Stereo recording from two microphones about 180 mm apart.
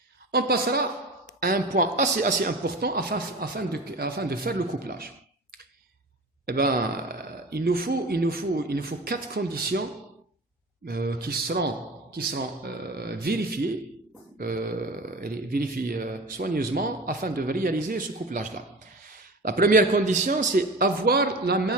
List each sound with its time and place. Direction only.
0.3 s speech: 60° right (ahead or behind)
6.4 s speech: 60° right (ahead or behind)
10.8 s a man's voice: 60° right (ahead or behind)